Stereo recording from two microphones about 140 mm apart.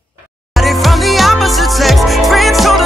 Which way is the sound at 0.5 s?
Centre (ahead or behind).